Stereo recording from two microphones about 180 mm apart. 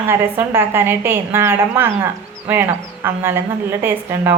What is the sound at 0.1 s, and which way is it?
A woman's voice, 10° right (ahead or behind).